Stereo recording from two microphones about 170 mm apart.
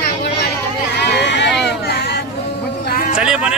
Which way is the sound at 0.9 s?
80° left.